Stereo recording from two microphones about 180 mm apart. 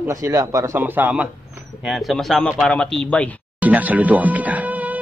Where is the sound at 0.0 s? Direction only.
15° right (ahead or behind); by 3.3 s 5° left (ahead or behind).